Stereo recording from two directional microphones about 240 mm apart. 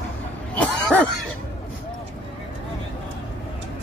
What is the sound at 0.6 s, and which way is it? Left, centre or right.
Cough, centre.